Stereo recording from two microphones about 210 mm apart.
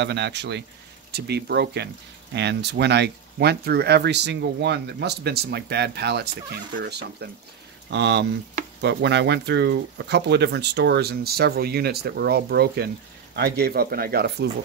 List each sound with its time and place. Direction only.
0.0 s speech: 55° right (ahead or behind)